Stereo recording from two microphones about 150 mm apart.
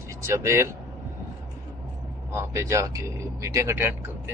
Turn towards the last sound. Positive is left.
turn(degrees=-15)  # may be behind; listen again after turning